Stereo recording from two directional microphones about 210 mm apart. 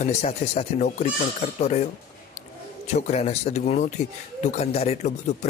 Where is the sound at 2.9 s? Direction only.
30° left (ahead or behind).